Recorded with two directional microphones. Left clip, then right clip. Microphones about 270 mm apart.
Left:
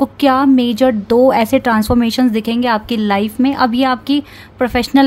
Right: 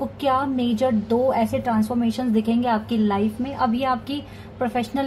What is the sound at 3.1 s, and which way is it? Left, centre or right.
A woman's voice, left.